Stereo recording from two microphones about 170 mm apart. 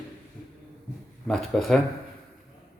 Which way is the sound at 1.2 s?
Centre (ahead or behind).